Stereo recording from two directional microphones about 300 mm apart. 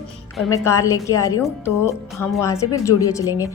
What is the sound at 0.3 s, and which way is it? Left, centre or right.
A woman's voice, centre.